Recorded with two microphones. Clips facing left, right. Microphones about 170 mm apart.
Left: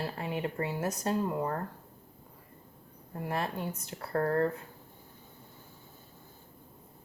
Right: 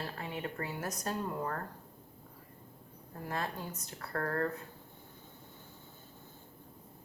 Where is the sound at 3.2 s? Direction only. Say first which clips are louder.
Left 4 dB; 25° left (ahead or behind).